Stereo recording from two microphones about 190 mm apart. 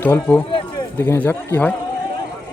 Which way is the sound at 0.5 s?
25° left (ahead or behind).